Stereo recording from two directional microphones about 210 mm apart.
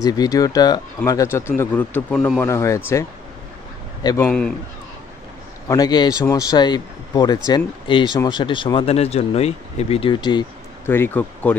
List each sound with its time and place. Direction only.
0.0 s speech: 15° left (ahead or behind)
4.3 s a man's voice: 5° left (ahead or behind)
5.7 s speech: 20° left (ahead or behind)
10.9 s speech: 10° left (ahead or behind)